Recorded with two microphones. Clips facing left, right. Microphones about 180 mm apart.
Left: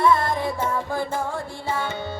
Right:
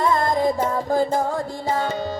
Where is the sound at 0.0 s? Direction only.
40° right (ahead or behind).